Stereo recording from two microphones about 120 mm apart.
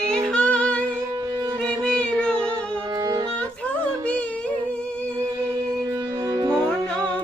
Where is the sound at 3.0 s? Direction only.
30° right (ahead or behind).